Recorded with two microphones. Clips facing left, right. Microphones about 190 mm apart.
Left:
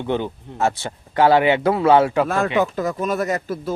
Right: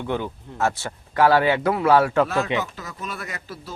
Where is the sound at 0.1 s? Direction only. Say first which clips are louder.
Left 5 dB; 20° left (ahead or behind).